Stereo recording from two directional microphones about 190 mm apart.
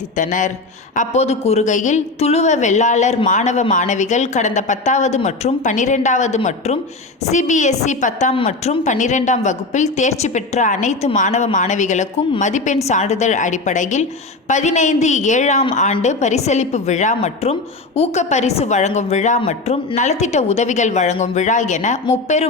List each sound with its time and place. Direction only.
0.2 s a woman's voice: 40° left (ahead or behind)